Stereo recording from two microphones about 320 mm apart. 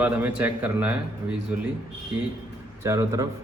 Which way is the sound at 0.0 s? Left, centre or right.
Centre.